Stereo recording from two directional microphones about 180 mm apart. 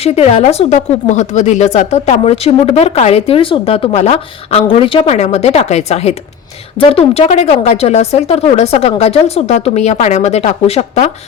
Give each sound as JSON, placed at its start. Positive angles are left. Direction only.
{"t": 0.0, "sound": "speech", "side_deg": 35}